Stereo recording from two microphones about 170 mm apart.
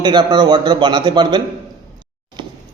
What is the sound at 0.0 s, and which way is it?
Speech, 25° right (ahead or behind).